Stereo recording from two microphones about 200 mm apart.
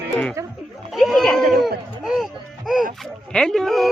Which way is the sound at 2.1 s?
Centre (ahead or behind).